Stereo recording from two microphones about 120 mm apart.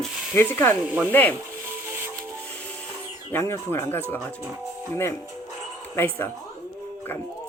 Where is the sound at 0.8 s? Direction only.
10° right (ahead or behind).